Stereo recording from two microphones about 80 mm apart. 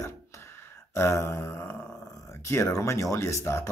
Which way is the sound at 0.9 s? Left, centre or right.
Left.